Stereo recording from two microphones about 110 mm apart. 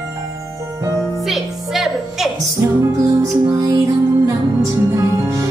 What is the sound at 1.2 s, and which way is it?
Music, centre (ahead or behind).